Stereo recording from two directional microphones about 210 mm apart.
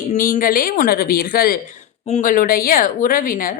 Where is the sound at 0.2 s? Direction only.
40° left (ahead or behind).